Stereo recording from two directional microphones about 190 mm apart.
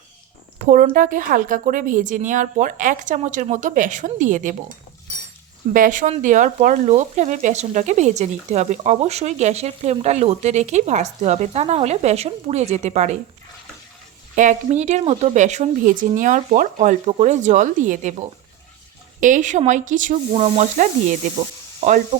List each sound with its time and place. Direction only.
0.6 s a woman's voice: 45° right (ahead or behind)
5.7 s speech: 45° right (ahead or behind)
14.3 s speech: 40° right (ahead or behind)
19.2 s speech: 40° right (ahead or behind)
21.8 s sizzle: 40° right (ahead or behind)